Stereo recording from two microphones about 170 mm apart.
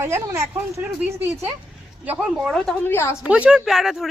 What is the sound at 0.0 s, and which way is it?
Speech, 15° right (ahead or behind).